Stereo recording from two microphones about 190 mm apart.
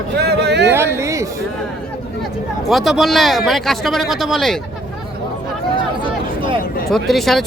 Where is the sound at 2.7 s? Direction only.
Centre (ahead or behind).